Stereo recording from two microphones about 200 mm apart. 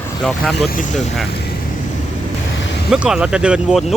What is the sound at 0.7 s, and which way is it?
Speech, 40° left (ahead or behind).